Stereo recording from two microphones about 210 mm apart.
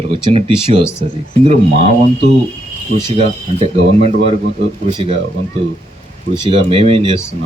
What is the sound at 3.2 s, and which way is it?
Speech, 30° right (ahead or behind).